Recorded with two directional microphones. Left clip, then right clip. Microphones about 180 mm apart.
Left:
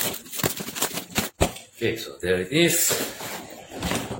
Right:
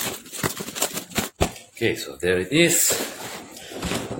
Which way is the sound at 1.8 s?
45° right (ahead or behind).